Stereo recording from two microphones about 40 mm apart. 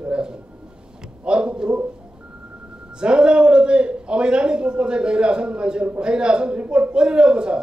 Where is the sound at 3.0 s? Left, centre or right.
Right.